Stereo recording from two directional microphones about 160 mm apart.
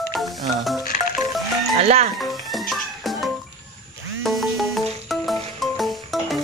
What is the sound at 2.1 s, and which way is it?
Music, centre (ahead or behind).